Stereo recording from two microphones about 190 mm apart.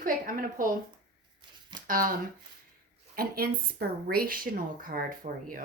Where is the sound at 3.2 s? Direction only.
50° right (ahead or behind).